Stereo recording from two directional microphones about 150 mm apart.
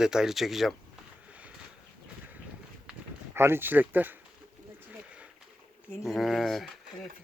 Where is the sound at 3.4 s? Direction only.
15° right (ahead or behind).